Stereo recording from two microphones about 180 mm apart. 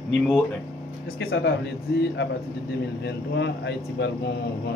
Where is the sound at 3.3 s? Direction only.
75° left (ahead or behind).